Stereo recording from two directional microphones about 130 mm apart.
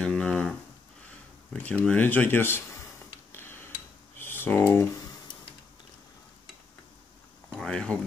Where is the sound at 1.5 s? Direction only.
10° left (ahead or behind).